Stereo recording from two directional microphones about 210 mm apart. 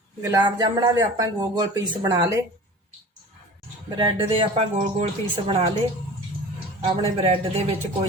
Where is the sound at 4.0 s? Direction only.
25° right (ahead or behind).